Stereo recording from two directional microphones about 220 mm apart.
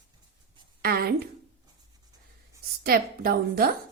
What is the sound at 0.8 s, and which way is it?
Speech, 45° right (ahead or behind).